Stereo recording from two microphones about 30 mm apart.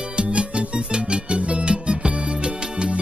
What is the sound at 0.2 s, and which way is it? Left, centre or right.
Music, right.